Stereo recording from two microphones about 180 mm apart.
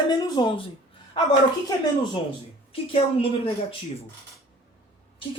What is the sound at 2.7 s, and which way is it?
Speech, 30° left (ahead or behind).